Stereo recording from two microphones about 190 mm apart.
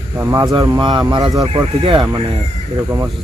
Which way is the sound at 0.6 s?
25° right (ahead or behind).